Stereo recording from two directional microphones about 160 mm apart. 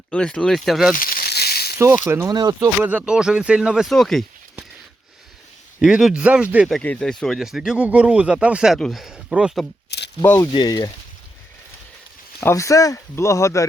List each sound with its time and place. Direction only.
0.1 s speech: 5° left (ahead or behind)
0.9 s rattle: 60° left (ahead or behind); by 1.7 s 75° left (ahead or behind)
2.0 s speech: 20° right (ahead or behind)
2.6 s speech: 10° right (ahead or behind)
5.8 s speech: 5° right (ahead or behind)
10.2 s speech: 15° left (ahead or behind)
10.5 s speech: 25° left (ahead or behind)
12.4 s speech: 15° left (ahead or behind)